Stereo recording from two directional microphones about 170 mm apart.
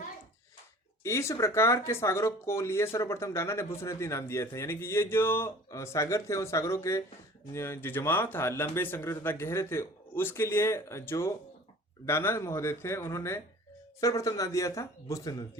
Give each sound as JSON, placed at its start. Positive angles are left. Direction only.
{"t": 1.0, "sound": "speech", "side_deg": 15}